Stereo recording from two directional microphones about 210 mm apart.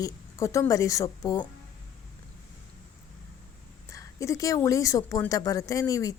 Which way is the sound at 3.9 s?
15° left (ahead or behind).